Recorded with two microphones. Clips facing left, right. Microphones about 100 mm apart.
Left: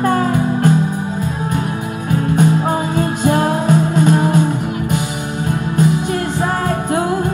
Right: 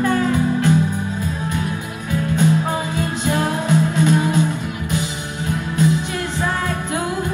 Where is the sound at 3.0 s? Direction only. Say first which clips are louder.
Left 6 dB; 50° left (ahead or behind).